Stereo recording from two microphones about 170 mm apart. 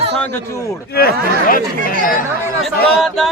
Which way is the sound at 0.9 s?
65° left (ahead or behind).